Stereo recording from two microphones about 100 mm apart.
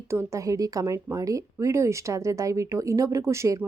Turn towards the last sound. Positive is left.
turn(degrees=-30)  # may be behind; listen again after turning